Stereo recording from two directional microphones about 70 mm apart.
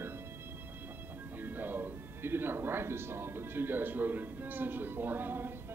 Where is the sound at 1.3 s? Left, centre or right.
Right.